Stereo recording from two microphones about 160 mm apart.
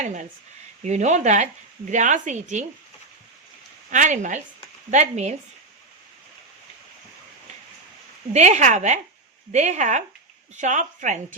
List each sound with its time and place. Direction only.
0.0 s speech: 50° right (ahead or behind)
3.8 s speech: 50° right (ahead or behind)
8.3 s speech: 45° right (ahead or behind)